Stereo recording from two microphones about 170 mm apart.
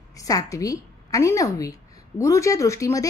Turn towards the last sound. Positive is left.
turn(degrees=20)  # may be behind; listen again after turning